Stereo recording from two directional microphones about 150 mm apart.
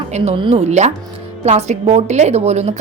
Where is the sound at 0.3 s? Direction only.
40° right (ahead or behind).